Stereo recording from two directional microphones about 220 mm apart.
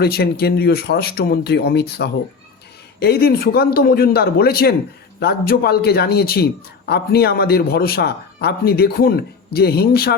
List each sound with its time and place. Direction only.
0.0 s a man's voice: 45° left (ahead or behind)